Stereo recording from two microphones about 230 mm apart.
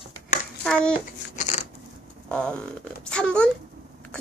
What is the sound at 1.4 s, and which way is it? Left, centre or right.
Scissors, left.